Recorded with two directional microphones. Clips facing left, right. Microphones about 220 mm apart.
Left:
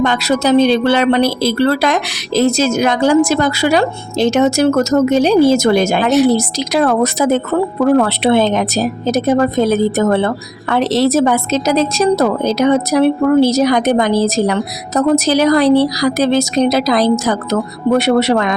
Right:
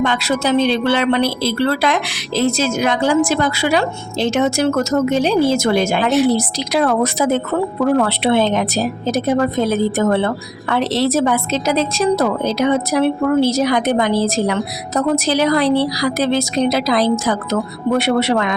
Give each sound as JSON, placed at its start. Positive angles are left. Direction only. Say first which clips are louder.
{"t": 0.0, "sound": "a woman's voice", "louder": "left 3 dB", "side_deg": 40}